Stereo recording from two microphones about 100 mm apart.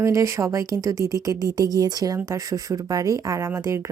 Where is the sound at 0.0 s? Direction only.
30° right (ahead or behind).